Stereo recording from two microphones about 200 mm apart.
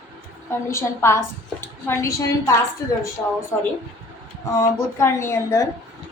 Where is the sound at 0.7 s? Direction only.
15° left (ahead or behind).